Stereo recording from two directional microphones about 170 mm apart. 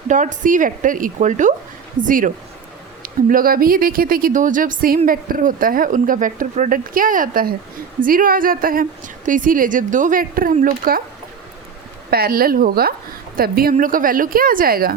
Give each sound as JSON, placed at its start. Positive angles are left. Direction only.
{"t": 0.1, "sound": "a woman's voice", "side_deg": -45}
{"t": 12.1, "sound": "a woman's voice", "side_deg": -60}